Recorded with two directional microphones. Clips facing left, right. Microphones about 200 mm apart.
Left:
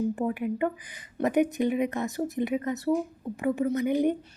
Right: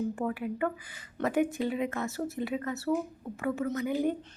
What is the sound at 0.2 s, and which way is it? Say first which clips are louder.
A woman's voice: left 4 dB; 20° left (ahead or behind).